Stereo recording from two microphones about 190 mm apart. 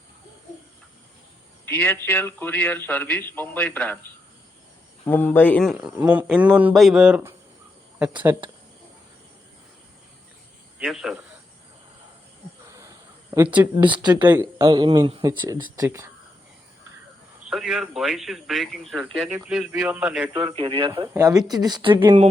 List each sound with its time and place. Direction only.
1.6 s a man's voice: 10° left (ahead or behind)
5.0 s speech: 10° left (ahead or behind); by 8.4 s 10° right (ahead or behind)
10.8 s speech: 5° right (ahead or behind)
13.3 s speech: 10° right (ahead or behind)
14.0 s speech: 20° right (ahead or behind)
17.5 s speech: centre (ahead or behind)
20.5 s speech: 30° right (ahead or behind)